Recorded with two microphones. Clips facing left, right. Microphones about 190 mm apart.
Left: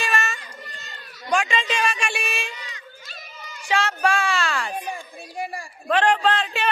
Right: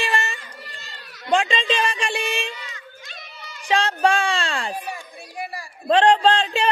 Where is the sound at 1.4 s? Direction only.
30° right (ahead or behind).